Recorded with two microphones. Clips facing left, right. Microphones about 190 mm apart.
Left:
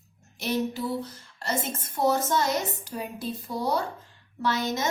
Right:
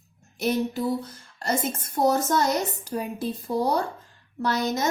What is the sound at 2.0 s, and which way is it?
A woman's voice, 45° right (ahead or behind).